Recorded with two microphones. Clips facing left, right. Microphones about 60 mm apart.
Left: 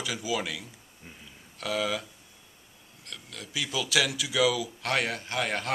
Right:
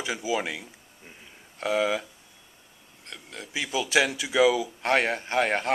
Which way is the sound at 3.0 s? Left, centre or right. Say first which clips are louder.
Right 2 dB; right.